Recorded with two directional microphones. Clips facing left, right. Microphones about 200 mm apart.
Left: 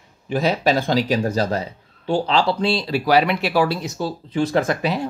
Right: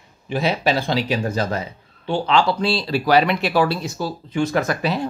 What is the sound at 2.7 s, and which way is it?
Speech, 15° left (ahead or behind).